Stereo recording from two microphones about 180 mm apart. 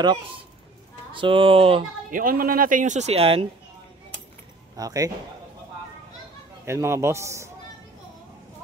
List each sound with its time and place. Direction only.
1.1 s speech: 30° right (ahead or behind)
2.0 s speech: 50° right (ahead or behind); by 3.4 s 30° right (ahead or behind)
4.7 s speech: 20° right (ahead or behind)
6.6 s a man's voice: 15° right (ahead or behind)